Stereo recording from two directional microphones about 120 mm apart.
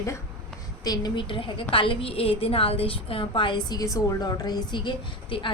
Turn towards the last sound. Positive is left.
turn(degrees=45)  # may be behind; listen again after turning